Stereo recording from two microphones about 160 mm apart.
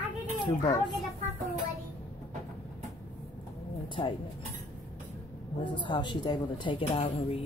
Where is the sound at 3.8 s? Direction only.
30° left (ahead or behind).